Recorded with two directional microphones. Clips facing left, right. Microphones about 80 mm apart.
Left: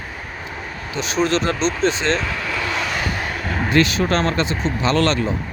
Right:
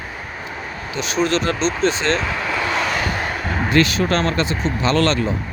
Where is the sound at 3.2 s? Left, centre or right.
Right.